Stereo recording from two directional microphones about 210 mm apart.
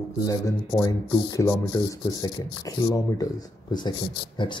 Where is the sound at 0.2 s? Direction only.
15° left (ahead or behind).